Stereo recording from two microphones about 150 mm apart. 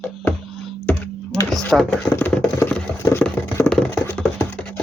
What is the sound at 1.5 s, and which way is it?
Speech, centre (ahead or behind).